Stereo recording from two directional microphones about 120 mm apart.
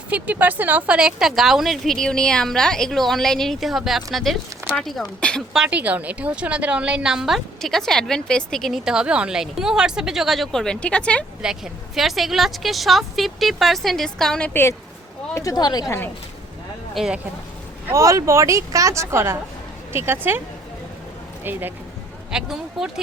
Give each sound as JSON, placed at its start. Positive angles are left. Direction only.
{"t": 0.1, "sound": "a woman's voice", "side_deg": -15}
{"t": 5.5, "sound": "a woman's voice", "side_deg": -10}
{"t": 11.4, "sound": "a woman's voice", "side_deg": -5}
{"t": 14.5, "sound": "a woman's voice", "side_deg": 20}
{"t": 15.4, "sound": "speech", "side_deg": 30}
{"t": 16.9, "sound": "speech", "side_deg": -5}
{"t": 17.8, "sound": "speech", "side_deg": -25}
{"t": 22.3, "sound": "a woman's voice", "side_deg": -5}